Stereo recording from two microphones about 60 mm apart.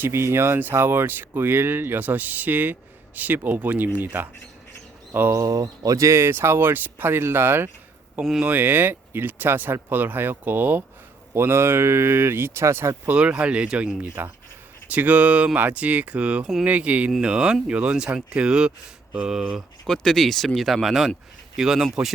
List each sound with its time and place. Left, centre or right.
0.0 s speech: right
5.3 s speech: right
6.1 s speech: right
11.3 s speech: right
13.1 s speech: centre
19.8 s speech: centre